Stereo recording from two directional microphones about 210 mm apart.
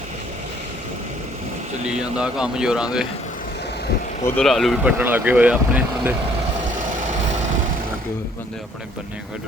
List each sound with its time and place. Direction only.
2.0 s speech: 5° right (ahead or behind)
4.4 s speech: centre (ahead or behind)
6.7 s vehicle: 40° right (ahead or behind)